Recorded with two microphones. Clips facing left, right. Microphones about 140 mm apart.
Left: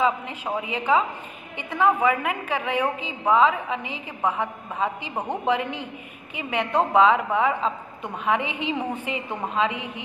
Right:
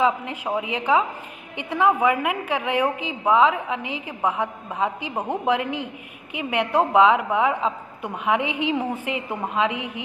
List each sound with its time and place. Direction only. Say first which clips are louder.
0.0 s a woman's voice: right 2 dB; 10° right (ahead or behind)